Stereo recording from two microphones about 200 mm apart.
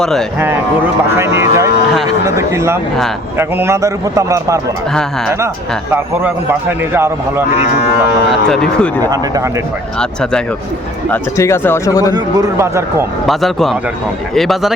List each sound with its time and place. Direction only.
0.0 s speech: centre (ahead or behind)
1.1 s a man's voice: 15° right (ahead or behind)
5.9 s a man's voice: 10° right (ahead or behind)
8.4 s speech: 5° left (ahead or behind)
9.0 s a man's voice: 15° right (ahead or behind)
10.0 s speech: 5° left (ahead or behind)
12.1 s a man's voice: 15° right (ahead or behind)
13.2 s speech: centre (ahead or behind)